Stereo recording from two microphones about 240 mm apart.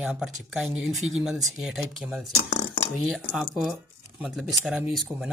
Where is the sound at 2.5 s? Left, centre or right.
Left.